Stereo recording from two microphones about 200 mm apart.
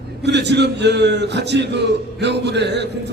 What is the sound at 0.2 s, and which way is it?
A man's voice, 60° right (ahead or behind).